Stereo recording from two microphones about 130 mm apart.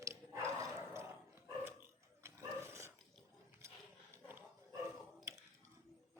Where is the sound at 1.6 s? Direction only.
20° right (ahead or behind).